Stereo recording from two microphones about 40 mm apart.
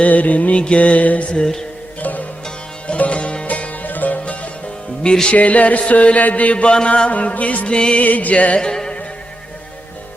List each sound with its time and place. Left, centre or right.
0.0 s music: left
2.8 s music: left
7.7 s music: left
8.0 s music: left
8.7 s music: centre